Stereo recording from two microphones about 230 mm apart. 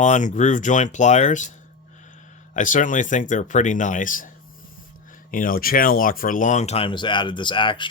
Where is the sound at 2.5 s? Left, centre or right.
Left.